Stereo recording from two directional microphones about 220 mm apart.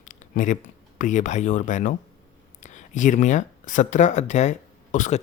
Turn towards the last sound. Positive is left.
turn(degrees=35)  # may be behind; listen again after turning